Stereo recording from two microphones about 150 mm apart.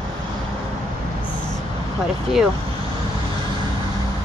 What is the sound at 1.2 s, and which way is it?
Vehicle, 30° left (ahead or behind).